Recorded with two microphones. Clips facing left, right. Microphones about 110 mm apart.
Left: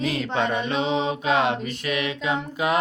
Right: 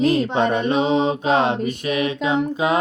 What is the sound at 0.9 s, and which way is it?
Mantra, 25° right (ahead or behind).